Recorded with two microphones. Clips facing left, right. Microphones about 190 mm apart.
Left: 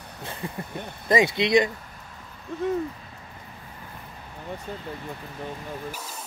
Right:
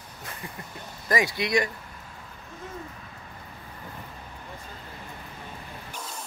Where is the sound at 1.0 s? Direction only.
25° left (ahead or behind).